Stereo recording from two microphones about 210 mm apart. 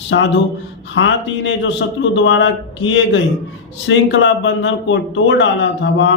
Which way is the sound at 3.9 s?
65° left (ahead or behind).